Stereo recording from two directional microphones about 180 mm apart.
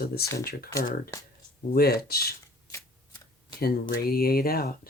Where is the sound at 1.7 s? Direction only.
60° left (ahead or behind).